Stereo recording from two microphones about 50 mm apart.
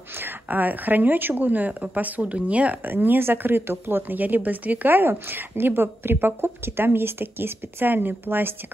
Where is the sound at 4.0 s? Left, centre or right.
Right.